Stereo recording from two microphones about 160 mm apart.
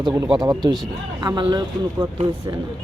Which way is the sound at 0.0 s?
25° right (ahead or behind).